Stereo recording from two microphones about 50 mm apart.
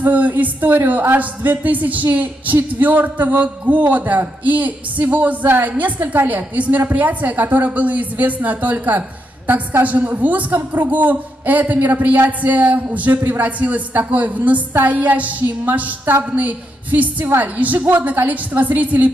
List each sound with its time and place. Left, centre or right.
0.0 s a woman's voice: right